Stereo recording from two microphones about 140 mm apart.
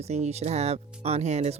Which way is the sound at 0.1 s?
50° right (ahead or behind).